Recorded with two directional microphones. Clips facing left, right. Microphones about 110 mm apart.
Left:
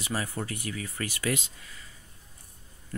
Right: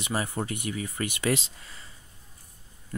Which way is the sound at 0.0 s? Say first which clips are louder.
Right 3 dB; 25° right (ahead or behind).